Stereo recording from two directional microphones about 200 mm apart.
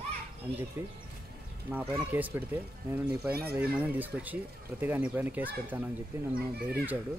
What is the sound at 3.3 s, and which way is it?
Speech, 50° right (ahead or behind).